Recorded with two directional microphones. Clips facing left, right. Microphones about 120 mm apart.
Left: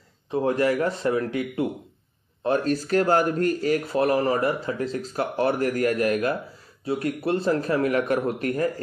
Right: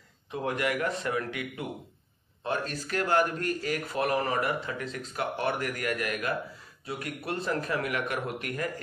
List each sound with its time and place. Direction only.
0.3 s speech: 35° left (ahead or behind)